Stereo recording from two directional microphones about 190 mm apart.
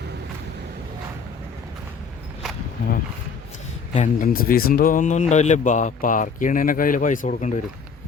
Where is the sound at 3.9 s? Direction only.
40° left (ahead or behind).